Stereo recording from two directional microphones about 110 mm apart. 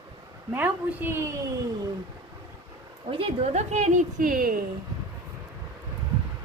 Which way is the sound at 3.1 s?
65° right (ahead or behind).